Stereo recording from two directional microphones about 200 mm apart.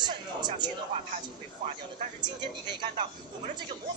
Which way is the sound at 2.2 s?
20° right (ahead or behind).